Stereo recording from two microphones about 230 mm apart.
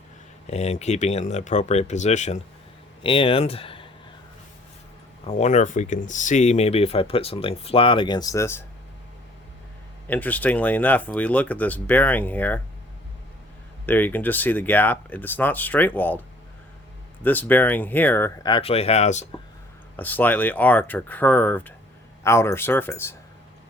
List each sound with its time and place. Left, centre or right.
0.4 s speech: left
5.2 s speech: left; by 8.6 s centre
10.1 s speech: centre
13.8 s speech: centre
17.2 s speech: centre
18.4 s speech: left
20.0 s speech: centre